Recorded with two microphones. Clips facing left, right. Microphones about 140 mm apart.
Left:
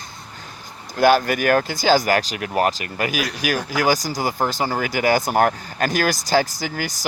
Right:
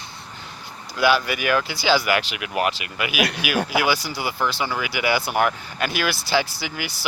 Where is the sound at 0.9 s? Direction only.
45° left (ahead or behind).